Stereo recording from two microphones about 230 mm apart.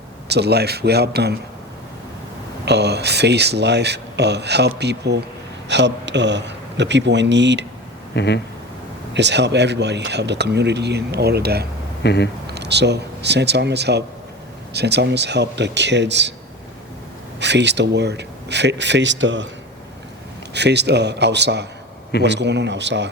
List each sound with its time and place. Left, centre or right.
0.3 s speech: right
2.6 s a man's voice: right
8.1 s speech: left
9.1 s speech: right
12.0 s speech: left
12.5 s speech: right
17.4 s speech: right
20.5 s speech: right